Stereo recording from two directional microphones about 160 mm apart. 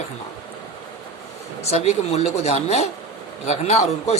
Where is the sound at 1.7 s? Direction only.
45° left (ahead or behind).